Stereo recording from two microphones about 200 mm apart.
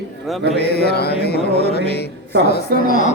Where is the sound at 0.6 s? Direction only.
55° left (ahead or behind).